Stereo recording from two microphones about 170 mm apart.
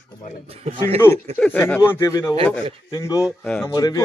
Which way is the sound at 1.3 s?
10° left (ahead or behind).